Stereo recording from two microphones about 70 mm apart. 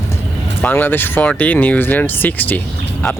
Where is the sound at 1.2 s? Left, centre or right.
Centre.